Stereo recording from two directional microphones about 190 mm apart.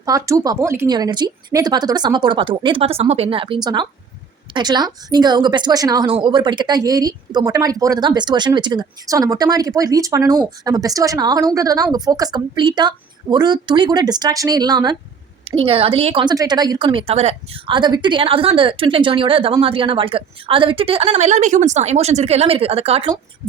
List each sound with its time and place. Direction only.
0.0 s speech: 15° right (ahead or behind)